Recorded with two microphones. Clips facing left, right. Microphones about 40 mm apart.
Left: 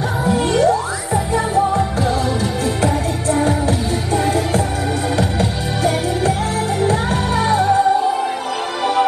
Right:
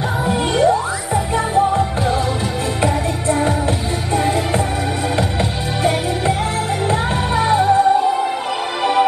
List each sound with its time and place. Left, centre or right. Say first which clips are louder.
0.2 s music: left 3 dB; right
0.5 s music: right 2 dB; centre
1.3 s music: right 1 dB; right
4.1 s music: even; centre
5.1 s music: left 1 dB; right
7.3 s music: right 1 dB; centre